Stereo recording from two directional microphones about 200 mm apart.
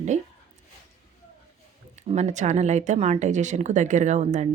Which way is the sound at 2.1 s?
35° right (ahead or behind).